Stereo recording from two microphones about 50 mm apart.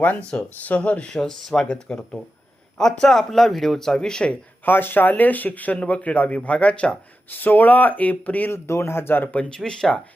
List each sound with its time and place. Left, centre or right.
0.0 s speech: left
1.1 s speech: centre
4.6 s speech: left
7.3 s speech: left
8.5 s speech: left
9.3 s speech: left
9.6 s speech: centre